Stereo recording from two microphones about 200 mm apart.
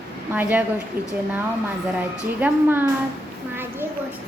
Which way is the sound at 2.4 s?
10° right (ahead or behind).